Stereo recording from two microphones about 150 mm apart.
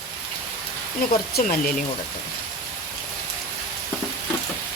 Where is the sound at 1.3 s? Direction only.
75° left (ahead or behind).